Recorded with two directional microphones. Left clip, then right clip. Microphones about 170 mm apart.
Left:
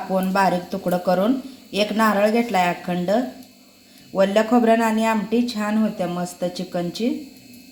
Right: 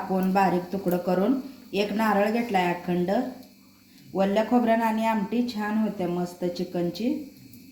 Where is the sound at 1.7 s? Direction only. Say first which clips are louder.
Left 5 dB; 25° left (ahead or behind).